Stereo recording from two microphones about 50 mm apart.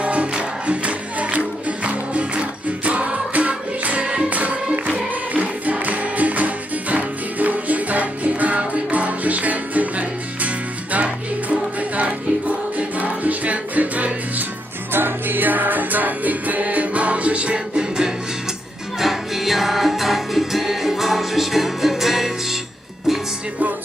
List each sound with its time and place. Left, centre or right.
0.0 s music: right
14.9 s music: right; by 18.1 s centre
18.9 s music: centre